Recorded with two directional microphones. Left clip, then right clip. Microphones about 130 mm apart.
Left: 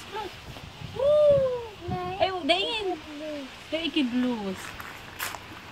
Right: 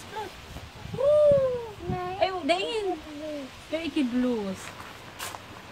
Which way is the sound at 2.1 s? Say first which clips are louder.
Left 1 dB; 15° right (ahead or behind).